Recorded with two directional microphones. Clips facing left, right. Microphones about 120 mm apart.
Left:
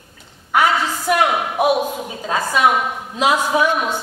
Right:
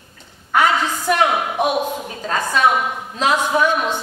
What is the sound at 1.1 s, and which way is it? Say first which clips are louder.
A woman's voice: even; 5° left (ahead or behind).